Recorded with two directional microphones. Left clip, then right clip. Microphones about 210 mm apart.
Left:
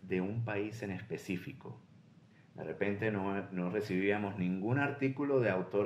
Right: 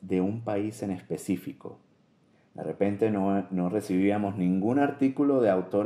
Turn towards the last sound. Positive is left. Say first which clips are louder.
# right 7 dB
turn(degrees=-30)  # may be behind; listen again after turning